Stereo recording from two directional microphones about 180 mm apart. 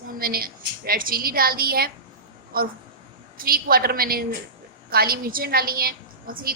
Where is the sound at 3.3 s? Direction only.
55° right (ahead or behind).